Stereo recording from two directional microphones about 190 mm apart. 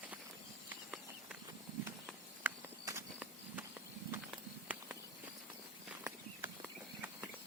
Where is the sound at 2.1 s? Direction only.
10° right (ahead or behind).